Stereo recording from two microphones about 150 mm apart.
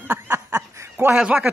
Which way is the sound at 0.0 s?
15° right (ahead or behind).